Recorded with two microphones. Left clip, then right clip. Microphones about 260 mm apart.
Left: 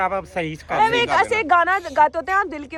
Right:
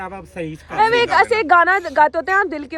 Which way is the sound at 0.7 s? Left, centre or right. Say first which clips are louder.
Right 3 dB; centre.